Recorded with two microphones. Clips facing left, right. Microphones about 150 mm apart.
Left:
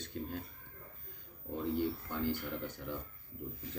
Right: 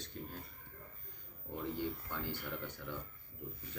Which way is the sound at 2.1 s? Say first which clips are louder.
Left 6 dB; 40° left (ahead or behind).